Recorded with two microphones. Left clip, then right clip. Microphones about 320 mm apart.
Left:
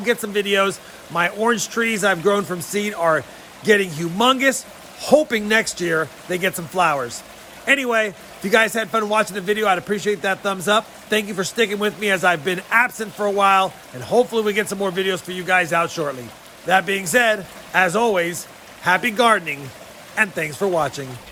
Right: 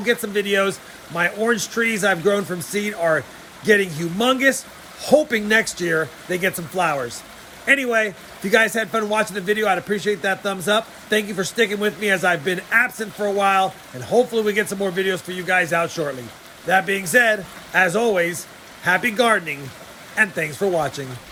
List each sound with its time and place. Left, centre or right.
0.0 s a man's voice: centre